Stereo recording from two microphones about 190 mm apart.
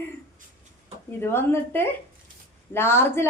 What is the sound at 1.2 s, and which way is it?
A woman's voice, 10° left (ahead or behind).